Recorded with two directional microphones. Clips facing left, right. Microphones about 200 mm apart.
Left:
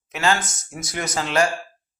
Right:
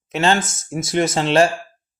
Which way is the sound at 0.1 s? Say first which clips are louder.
Right 4 dB; 25° right (ahead or behind).